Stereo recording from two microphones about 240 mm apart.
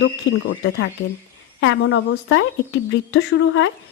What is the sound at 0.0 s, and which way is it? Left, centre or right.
A woman's voice, left.